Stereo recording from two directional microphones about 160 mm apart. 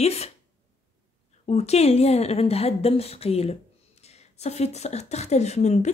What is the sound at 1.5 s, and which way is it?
Speech, 40° left (ahead or behind).